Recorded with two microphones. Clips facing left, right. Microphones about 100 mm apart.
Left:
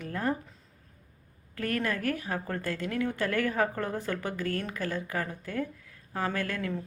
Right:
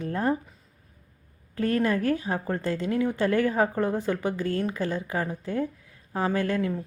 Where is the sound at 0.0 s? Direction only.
30° right (ahead or behind).